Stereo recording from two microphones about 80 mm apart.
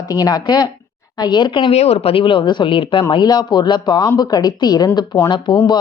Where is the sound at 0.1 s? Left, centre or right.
Left.